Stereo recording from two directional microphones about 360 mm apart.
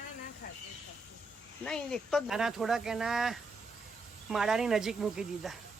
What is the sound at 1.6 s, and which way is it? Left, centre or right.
Speech, centre.